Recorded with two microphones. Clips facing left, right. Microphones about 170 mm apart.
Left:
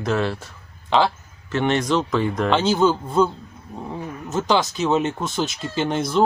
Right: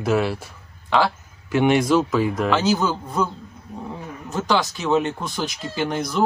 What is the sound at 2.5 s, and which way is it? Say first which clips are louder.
Speech: left 5 dB; 30° left (ahead or behind).